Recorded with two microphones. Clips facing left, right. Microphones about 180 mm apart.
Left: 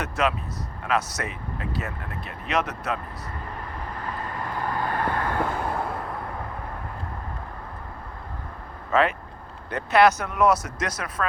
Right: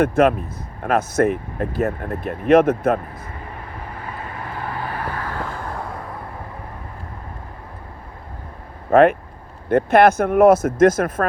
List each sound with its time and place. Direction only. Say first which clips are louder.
0.0 s speech: right 10 dB; 55° right (ahead or behind)
4.0 s vehicle: left 1 dB; 10° right (ahead or behind)
8.9 s speech: right 9 dB; 55° right (ahead or behind)